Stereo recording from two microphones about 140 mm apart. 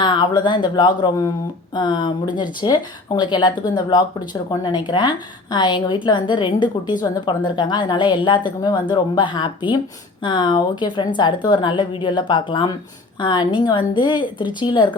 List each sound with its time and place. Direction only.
0.0 s a woman's voice: 30° left (ahead or behind)